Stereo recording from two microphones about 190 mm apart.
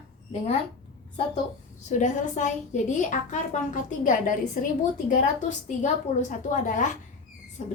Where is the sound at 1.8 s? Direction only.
40° left (ahead or behind).